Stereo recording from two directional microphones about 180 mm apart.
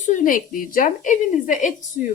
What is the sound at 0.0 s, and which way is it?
Speech, 45° left (ahead or behind).